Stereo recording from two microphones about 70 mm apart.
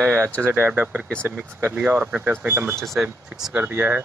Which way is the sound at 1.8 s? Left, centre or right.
Centre.